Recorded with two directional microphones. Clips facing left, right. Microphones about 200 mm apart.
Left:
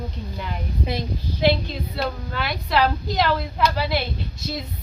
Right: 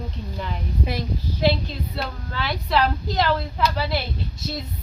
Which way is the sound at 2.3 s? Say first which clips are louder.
Right 1 dB; centre (ahead or behind).